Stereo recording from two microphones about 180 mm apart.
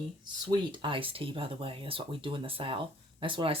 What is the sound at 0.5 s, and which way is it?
Speech, 25° right (ahead or behind).